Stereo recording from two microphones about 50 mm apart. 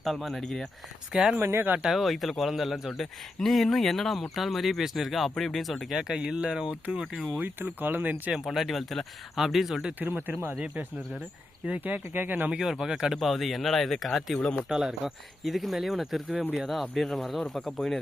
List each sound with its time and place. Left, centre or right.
0.0 s speech: centre
1.1 s speech: centre
1.4 s speech: right
1.9 s speech: centre
5.3 s speech: centre
6.0 s speech: centre
7.4 s speech: right
8.3 s speech: centre
10.0 s speech: right
12.5 s speech: centre
13.1 s speech: centre
14.3 s speech: left
14.7 s speech: centre